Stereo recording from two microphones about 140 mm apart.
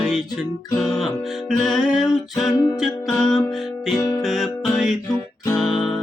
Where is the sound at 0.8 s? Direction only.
5° left (ahead or behind).